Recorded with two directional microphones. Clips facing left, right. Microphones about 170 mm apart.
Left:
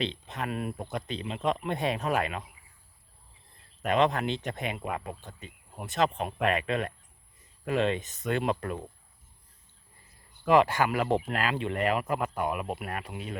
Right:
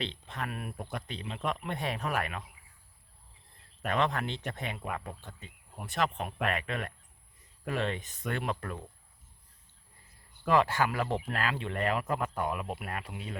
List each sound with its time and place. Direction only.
0.0 s speech: 20° left (ahead or behind)
3.8 s speech: 20° left (ahead or behind)
10.5 s speech: 15° left (ahead or behind)